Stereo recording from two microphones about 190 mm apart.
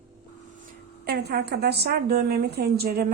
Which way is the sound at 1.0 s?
60° right (ahead or behind).